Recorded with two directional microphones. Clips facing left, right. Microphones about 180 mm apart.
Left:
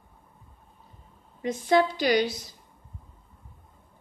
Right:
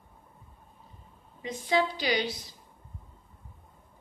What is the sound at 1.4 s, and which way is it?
Speech, 50° left (ahead or behind).